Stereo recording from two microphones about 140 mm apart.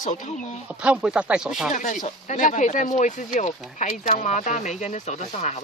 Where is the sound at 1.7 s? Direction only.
65° left (ahead or behind).